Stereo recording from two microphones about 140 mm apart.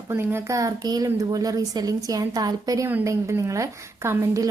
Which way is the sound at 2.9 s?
15° right (ahead or behind).